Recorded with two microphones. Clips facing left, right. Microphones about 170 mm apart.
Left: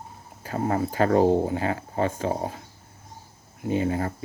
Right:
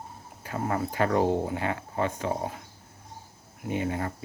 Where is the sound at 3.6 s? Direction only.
30° left (ahead or behind).